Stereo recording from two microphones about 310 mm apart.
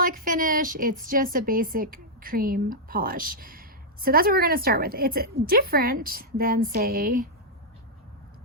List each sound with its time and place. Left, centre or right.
0.0 s a woman's voice: right